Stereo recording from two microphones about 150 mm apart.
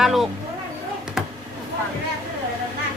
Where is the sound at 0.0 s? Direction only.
Centre (ahead or behind).